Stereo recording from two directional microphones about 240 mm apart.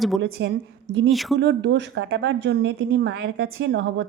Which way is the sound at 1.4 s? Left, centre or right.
Right.